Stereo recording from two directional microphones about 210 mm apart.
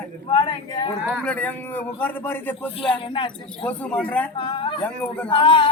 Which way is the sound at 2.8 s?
25° left (ahead or behind).